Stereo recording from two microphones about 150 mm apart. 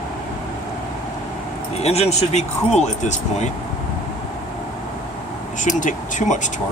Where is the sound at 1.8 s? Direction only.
45° left (ahead or behind).